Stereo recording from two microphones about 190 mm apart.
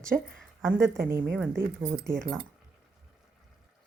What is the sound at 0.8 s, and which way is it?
Speech, 15° right (ahead or behind).